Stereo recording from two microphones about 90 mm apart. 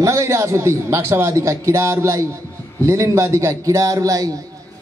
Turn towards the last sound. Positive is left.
turn(degrees=-40)  # may be behind; listen again after turning